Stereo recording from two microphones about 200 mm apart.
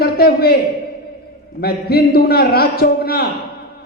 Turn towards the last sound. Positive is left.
turn(degrees=50)  # may be behind; listen again after turning